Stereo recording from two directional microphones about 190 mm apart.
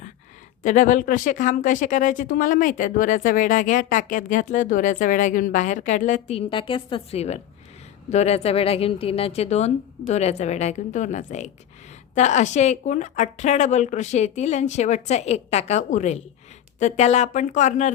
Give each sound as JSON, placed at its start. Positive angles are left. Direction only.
{"t": 0.6, "sound": "a woman's voice", "side_deg": 40}